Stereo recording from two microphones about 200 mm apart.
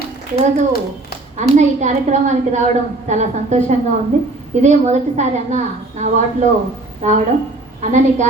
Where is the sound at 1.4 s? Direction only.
35° right (ahead or behind).